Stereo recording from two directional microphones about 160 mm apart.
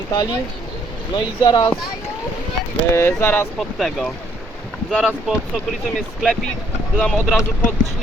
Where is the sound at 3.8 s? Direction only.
Centre (ahead or behind).